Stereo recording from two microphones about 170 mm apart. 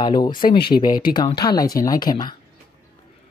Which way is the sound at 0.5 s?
65° left (ahead or behind).